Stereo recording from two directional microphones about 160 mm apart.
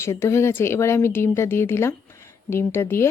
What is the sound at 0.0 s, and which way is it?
Speech, 15° left (ahead or behind).